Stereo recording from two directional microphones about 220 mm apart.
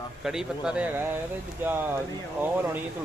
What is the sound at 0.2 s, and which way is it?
A man's voice, centre (ahead or behind).